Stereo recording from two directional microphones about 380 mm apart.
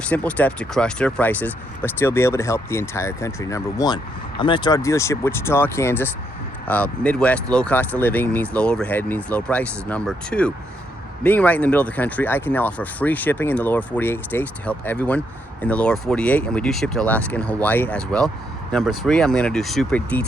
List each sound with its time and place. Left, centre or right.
0.0 s speech: centre